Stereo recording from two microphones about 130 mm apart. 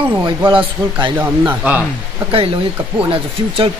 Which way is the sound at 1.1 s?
15° right (ahead or behind).